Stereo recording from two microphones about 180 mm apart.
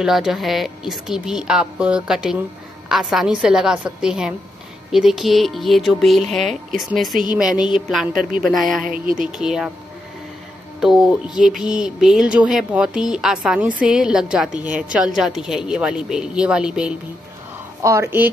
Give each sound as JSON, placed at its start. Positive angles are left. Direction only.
{"t": 0.0, "sound": "music", "side_deg": -5}
{"t": 8.8, "sound": "a woman's voice", "side_deg": -50}
{"t": 9.3, "sound": "music", "side_deg": -5}
{"t": 10.8, "sound": "music", "side_deg": -5}
{"t": 17.8, "sound": "speech", "side_deg": -15}